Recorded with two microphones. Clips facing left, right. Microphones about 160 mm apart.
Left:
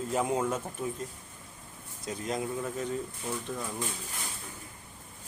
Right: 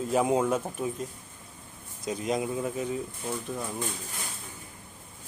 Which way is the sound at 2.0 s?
15° right (ahead or behind).